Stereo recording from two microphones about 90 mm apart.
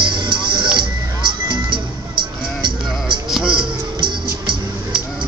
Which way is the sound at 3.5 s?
60° right (ahead or behind).